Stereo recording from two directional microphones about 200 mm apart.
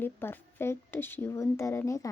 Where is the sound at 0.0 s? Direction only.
10° left (ahead or behind).